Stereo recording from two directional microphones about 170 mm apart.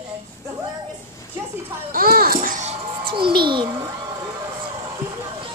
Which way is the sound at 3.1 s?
30° right (ahead or behind).